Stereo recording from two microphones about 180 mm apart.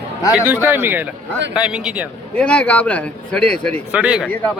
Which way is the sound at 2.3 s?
5° left (ahead or behind).